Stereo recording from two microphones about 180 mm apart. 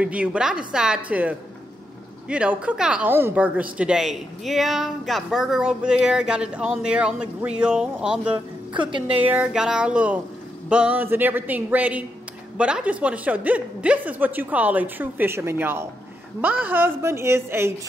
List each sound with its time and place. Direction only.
0.0 s a woman's voice: 5° right (ahead or behind)
8.9 s a woman's voice: 30° right (ahead or behind)
9.2 s a woman's voice: 10° right (ahead or behind)